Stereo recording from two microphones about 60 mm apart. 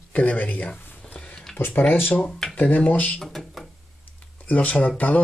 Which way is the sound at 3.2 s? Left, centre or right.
Centre.